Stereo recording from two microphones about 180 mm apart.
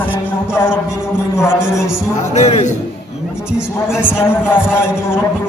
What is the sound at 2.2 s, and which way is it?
Speech, 40° left (ahead or behind).